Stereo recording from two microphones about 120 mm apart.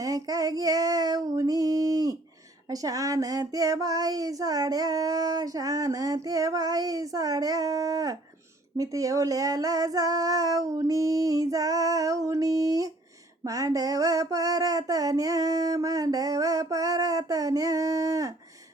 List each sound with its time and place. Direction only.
0.0 s child singing: 30° right (ahead or behind)
8.8 s female singing: 30° right (ahead or behind)
13.4 s child singing: 30° right (ahead or behind)